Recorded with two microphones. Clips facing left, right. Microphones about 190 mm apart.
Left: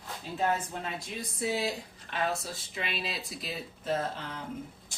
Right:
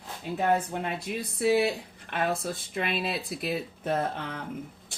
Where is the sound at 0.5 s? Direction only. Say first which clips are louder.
Right 6 dB; 60° right (ahead or behind).